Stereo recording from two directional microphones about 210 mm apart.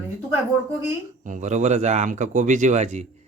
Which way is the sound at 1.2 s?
35° right (ahead or behind).